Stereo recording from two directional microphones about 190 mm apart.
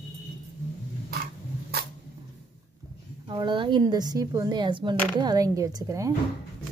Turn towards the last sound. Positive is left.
turn(degrees=-15)  # may be behind; listen again after turning